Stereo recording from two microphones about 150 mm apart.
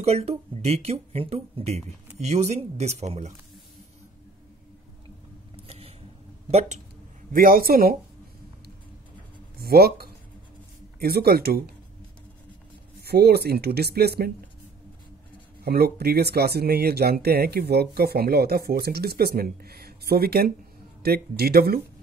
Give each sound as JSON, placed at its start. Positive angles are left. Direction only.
{"t": 0.0, "sound": "speech", "side_deg": -45}
{"t": 5.7, "sound": "vehicle", "side_deg": -40}
{"t": 7.3, "sound": "speech", "side_deg": -75}
{"t": 9.6, "sound": "speech", "side_deg": -90}
{"t": 13.0, "sound": "speech", "side_deg": -90}
{"t": 15.6, "sound": "speech", "side_deg": -90}